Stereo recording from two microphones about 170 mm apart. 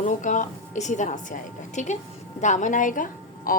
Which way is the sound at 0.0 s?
45° left (ahead or behind).